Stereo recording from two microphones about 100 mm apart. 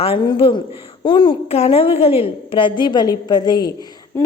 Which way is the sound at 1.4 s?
85° left.